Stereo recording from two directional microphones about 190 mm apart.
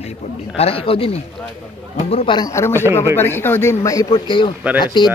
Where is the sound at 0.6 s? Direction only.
30° left (ahead or behind).